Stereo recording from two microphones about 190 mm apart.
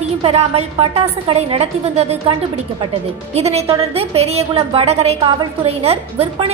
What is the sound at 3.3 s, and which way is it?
A woman's voice, 35° right (ahead or behind).